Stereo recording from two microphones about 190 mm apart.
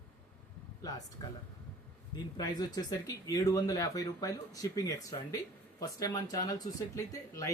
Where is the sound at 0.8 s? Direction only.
20° left (ahead or behind).